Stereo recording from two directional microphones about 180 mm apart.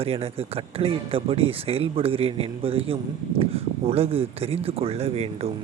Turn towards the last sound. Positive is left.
turn(degrees=-35)  # may be behind; listen again after turning